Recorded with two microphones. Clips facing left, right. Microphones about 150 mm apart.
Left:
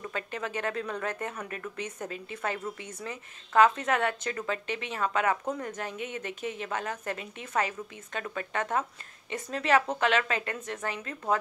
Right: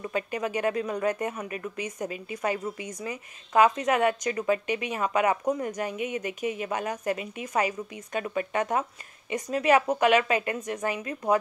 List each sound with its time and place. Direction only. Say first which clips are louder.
0.0 s a woman's voice: right 5 dB; 10° right (ahead or behind)